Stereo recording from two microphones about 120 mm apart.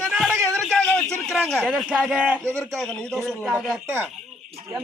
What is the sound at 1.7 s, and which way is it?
Speech, 10° right (ahead or behind).